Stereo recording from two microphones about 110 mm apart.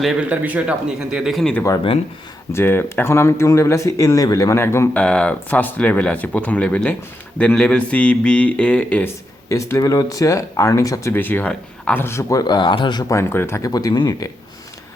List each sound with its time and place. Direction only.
0.0 s speech: 5° right (ahead or behind)
0.3 s speech: 15° right (ahead or behind)
2.5 s speech: 20° left (ahead or behind)
4.9 s speech: 10° left (ahead or behind)
9.5 s speech: 30° left (ahead or behind)
12.0 s speech: 30° left (ahead or behind); by 13.1 s 45° left (ahead or behind)
13.1 s speech: 25° left (ahead or behind)
13.6 s speech: 35° left (ahead or behind)